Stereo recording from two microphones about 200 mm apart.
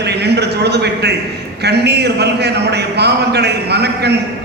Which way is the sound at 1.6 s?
55° right (ahead or behind).